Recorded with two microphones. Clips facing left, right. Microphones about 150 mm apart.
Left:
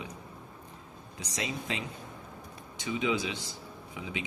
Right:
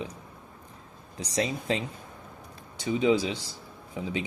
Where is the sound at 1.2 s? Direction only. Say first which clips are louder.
Right 7 dB; 35° right (ahead or behind).